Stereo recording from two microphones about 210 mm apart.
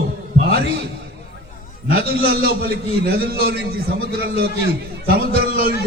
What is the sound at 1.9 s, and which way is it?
A man's voice, 45° right (ahead or behind).